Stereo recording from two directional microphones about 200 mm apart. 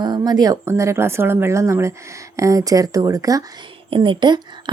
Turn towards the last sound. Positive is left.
turn(degrees=-20)  # may be behind; listen again after turning